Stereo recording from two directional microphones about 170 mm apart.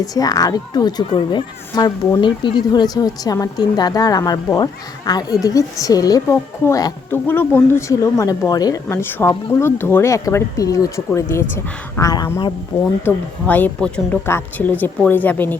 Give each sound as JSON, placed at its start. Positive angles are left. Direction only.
{"t": 0.0, "sound": "speech", "side_deg": 20}
{"t": 13.1, "sound": "speech", "side_deg": 10}